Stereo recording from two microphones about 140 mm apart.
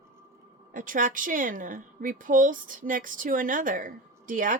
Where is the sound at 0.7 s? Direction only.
70° right (ahead or behind).